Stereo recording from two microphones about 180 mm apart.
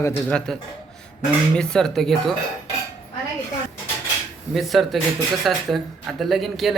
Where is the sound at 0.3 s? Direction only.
5° left (ahead or behind).